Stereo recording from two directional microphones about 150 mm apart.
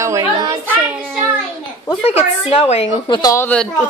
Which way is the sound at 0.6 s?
15° right (ahead or behind).